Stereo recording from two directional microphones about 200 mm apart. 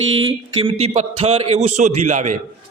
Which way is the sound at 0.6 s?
30° right (ahead or behind).